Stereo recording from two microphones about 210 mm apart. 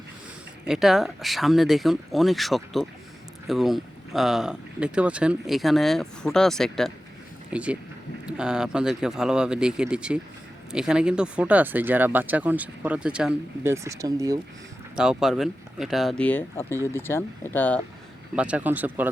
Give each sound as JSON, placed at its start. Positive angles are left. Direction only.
{"t": 0.6, "sound": "speech", "side_deg": 0}
{"t": 14.9, "sound": "speech", "side_deg": -5}
{"t": 18.3, "sound": "speech", "side_deg": -5}